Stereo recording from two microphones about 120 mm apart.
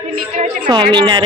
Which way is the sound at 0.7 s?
40° right (ahead or behind).